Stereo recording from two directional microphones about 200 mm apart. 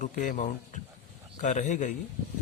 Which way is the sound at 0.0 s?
40° left (ahead or behind).